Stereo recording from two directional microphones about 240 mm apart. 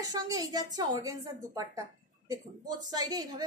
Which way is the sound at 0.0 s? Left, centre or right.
Centre.